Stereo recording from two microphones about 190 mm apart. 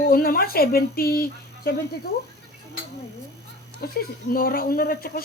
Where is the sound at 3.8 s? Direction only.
50° left (ahead or behind).